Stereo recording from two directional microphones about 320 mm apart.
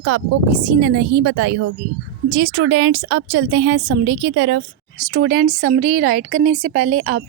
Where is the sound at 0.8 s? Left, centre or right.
Right.